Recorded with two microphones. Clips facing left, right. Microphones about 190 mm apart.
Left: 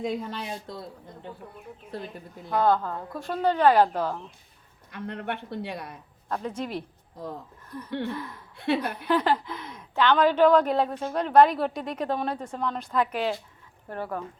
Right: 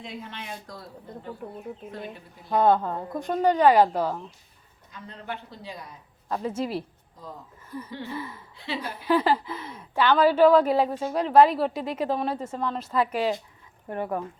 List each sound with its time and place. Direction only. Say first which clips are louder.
0.0 s speech: left 8 dB; 40° left (ahead or behind)
2.6 s a woman's voice: right 2 dB; 20° right (ahead or behind)
4.9 s speech: left 5 dB; 65° left (ahead or behind)
6.2 s a woman's voice: right 3 dB; 5° right (ahead or behind)
7.9 s speech: left 10 dB; 65° left (ahead or behind)
8.1 s a woman's voice: right 1 dB; 5° right (ahead or behind)
8.5 s speech: left 8 dB; 60° left (ahead or behind)
9.0 s a woman's voice: right 2 dB; 10° right (ahead or behind)